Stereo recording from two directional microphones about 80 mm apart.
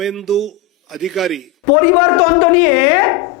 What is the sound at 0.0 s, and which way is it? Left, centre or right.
A man's voice, centre.